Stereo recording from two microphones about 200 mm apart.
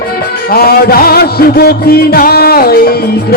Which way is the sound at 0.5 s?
50° left (ahead or behind).